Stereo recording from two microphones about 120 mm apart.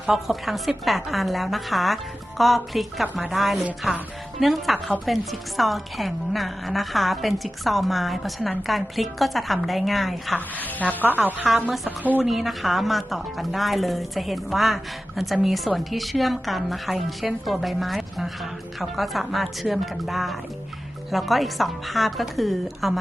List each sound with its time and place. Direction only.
0.0 s a woman's voice: 5° right (ahead or behind)
10.3 s a woman's voice: 15° left (ahead or behind)
11.1 s a woman's voice: 15° right (ahead or behind)
12.2 s a woman's voice: centre (ahead or behind)